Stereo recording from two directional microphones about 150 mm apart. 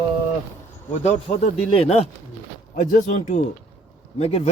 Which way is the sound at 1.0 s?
50° left (ahead or behind).